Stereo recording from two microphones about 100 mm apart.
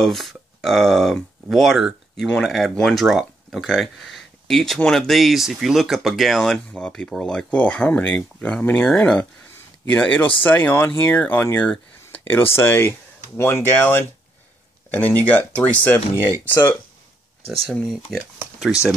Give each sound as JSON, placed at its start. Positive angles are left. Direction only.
{"t": 0.0, "sound": "speech", "side_deg": 0}
{"t": 12.1, "sound": "a sound", "side_deg": 20}
{"t": 12.5, "sound": "speech", "side_deg": 25}
{"t": 17.5, "sound": "speech", "side_deg": 0}